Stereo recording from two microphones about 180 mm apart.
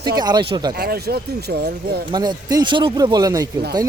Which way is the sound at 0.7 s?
60° right (ahead or behind).